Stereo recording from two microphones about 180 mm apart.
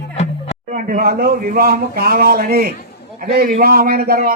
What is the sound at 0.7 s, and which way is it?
Speech, 55° right (ahead or behind).